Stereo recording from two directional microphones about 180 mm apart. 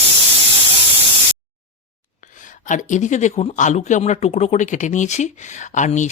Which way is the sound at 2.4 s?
45° left (ahead or behind).